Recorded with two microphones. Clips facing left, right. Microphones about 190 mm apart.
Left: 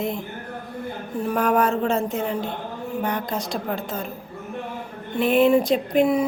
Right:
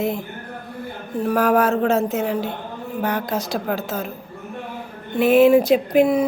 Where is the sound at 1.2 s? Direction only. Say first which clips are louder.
Right 3 dB; 5° right (ahead or behind).